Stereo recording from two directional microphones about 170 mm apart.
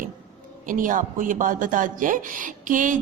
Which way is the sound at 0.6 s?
50° right (ahead or behind).